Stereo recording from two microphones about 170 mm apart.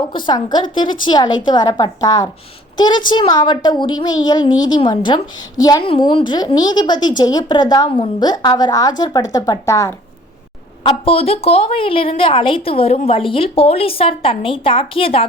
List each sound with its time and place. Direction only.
0.3 s a woman's voice: 25° left (ahead or behind)
10.8 s a woman's voice: 35° left (ahead or behind)